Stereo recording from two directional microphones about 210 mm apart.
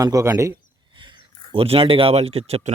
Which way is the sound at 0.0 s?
15° right (ahead or behind).